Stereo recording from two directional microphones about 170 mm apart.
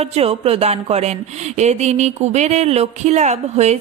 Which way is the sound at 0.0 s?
35° right (ahead or behind).